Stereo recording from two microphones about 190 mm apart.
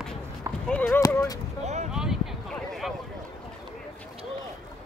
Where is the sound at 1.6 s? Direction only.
35° right (ahead or behind).